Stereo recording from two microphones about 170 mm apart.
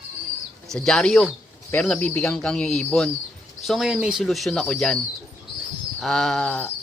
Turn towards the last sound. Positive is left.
turn(degrees=10)  # may be behind; listen again after turning